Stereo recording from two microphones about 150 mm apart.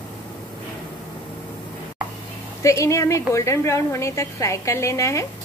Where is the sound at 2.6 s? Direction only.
20° left (ahead or behind).